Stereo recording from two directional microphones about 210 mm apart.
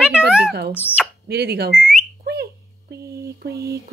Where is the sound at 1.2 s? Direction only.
50° right (ahead or behind).